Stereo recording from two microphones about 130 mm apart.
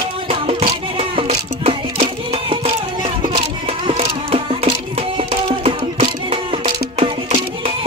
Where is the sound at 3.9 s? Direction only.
50° right (ahead or behind).